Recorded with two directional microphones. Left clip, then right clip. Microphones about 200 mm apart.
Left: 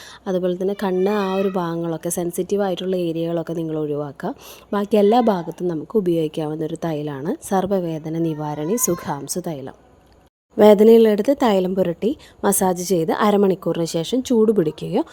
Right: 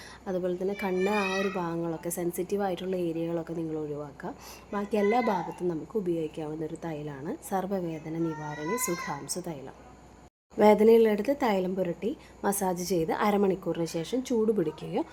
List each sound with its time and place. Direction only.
0.3 s speech: 45° left (ahead or behind)